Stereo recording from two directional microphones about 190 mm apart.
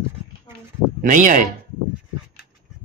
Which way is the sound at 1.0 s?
40° right (ahead or behind).